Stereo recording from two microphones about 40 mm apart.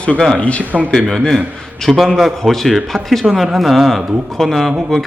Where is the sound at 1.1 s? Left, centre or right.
Centre.